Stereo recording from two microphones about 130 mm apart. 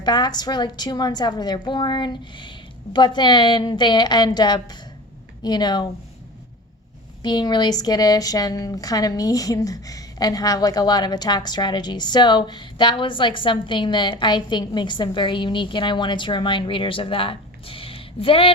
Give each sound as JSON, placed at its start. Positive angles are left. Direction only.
{"t": 0.0, "sound": "speech", "side_deg": 30}
{"t": 7.2, "sound": "speech", "side_deg": 35}